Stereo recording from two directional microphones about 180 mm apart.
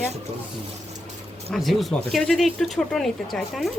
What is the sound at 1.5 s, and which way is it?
Speech, centre (ahead or behind).